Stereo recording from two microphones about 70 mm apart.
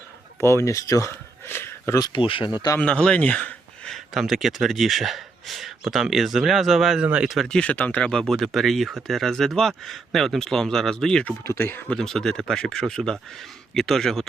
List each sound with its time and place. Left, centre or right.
0.3 s speech: left
1.1 s a sound: left
2.5 s speech: left
2.8 s speech: centre
4.1 s speech: centre
7.0 s speech: centre
7.4 s speech: centre
11.4 s speech: left
11.9 s speech: centre